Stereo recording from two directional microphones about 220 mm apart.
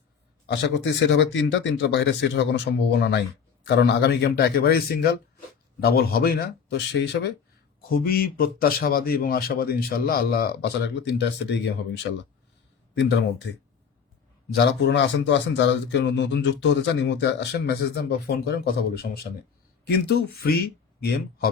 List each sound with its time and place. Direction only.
0.4 s a man's voice: 50° left (ahead or behind)
12.9 s speech: 50° left (ahead or behind)
14.5 s a man's voice: 50° left (ahead or behind)